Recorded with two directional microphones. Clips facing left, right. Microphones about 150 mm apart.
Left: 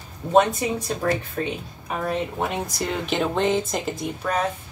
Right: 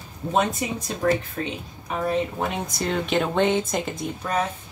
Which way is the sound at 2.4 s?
Centre (ahead or behind).